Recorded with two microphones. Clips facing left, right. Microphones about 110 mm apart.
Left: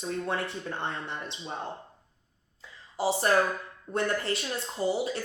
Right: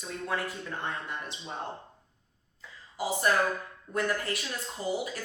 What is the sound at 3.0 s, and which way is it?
Speech, 30° left (ahead or behind).